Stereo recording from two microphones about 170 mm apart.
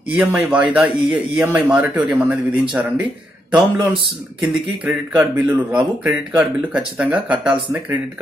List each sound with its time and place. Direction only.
0.1 s speech: 10° right (ahead or behind)
3.5 s a man's voice: 25° right (ahead or behind)
4.4 s speech: 10° right (ahead or behind)